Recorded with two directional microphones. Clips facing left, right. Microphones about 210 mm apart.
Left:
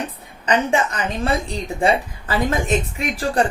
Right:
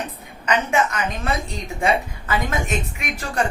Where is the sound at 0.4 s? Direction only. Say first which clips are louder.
Left 2 dB; 30° left (ahead or behind).